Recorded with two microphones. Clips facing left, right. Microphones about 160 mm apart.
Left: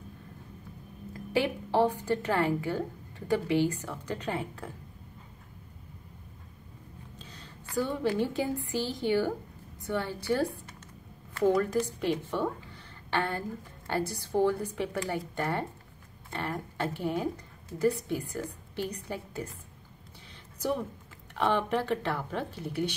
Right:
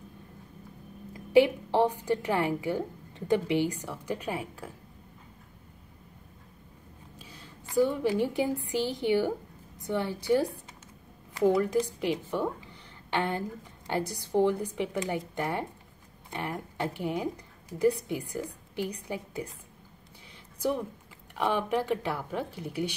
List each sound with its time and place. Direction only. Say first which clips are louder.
1.3 s a woman's voice: right 6 dB; 15° right (ahead or behind)
7.2 s a sound: even; 10° right (ahead or behind)
8.6 s a woman's voice: right 2 dB; 15° right (ahead or behind)
11.5 s a woman's voice: right 1 dB; 10° right (ahead or behind)
20.5 s a woman's voice: right 1 dB; 15° right (ahead or behind)